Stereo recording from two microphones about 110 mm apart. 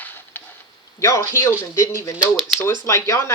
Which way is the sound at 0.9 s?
25° left (ahead or behind).